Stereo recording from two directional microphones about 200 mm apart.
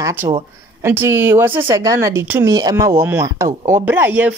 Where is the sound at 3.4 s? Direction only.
40° right (ahead or behind).